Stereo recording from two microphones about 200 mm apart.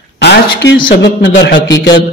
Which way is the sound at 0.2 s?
60° left (ahead or behind).